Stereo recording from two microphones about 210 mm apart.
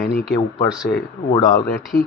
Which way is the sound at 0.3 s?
20° left (ahead or behind).